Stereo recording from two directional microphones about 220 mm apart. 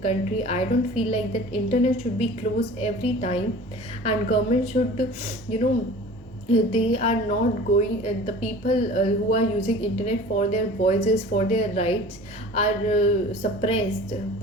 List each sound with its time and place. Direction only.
0.0 s a woman's voice: 30° left (ahead or behind)